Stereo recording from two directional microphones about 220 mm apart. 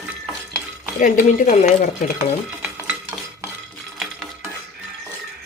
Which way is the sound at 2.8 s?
10° right (ahead or behind).